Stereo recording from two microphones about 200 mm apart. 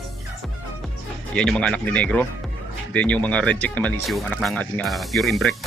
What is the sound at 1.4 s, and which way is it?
A man's voice, 5° left (ahead or behind).